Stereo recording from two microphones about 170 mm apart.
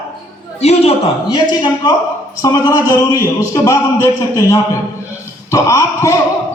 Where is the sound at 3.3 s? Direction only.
20° left (ahead or behind).